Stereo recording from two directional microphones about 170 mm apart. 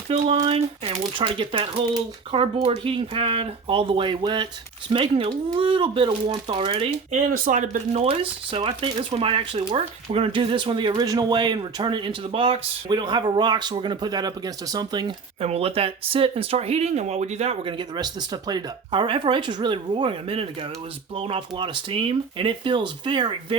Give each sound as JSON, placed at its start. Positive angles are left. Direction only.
{"t": 0.1, "sound": "speech", "side_deg": -35}
{"t": 7.1, "sound": "speech", "side_deg": -45}